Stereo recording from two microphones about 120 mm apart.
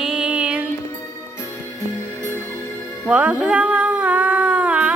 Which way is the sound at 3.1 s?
10° right (ahead or behind).